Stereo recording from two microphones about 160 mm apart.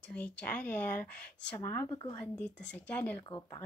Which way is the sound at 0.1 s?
10° left (ahead or behind).